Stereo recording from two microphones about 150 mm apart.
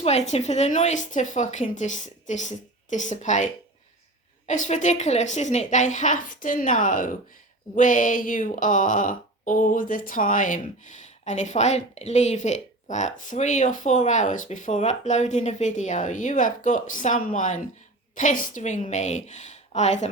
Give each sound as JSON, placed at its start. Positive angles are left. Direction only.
{"t": 0.0, "sound": "a woman's voice", "side_deg": 45}